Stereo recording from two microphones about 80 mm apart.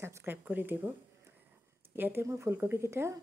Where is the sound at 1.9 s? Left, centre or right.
Right.